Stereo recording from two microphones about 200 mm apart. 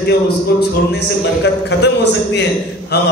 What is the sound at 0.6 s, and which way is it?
A man's voice, 60° left (ahead or behind).